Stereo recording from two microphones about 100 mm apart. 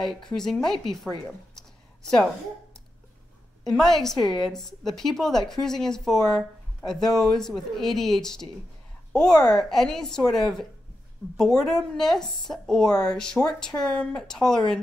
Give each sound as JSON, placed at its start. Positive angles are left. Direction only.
{"t": 0.3, "sound": "speech", "side_deg": 5}
{"t": 3.6, "sound": "a woman's voice", "side_deg": 5}